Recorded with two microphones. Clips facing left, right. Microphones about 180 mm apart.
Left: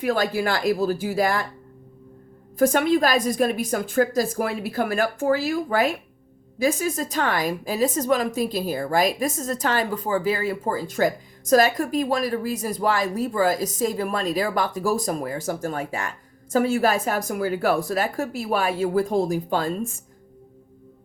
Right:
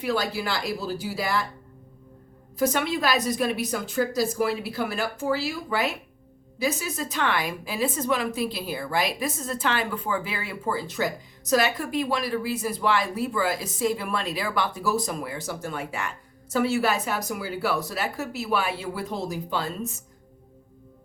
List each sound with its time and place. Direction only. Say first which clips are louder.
0.0 s a woman's voice: left 4 dB; 45° left (ahead or behind)
2.6 s a woman's voice: left 6 dB; 45° left (ahead or behind)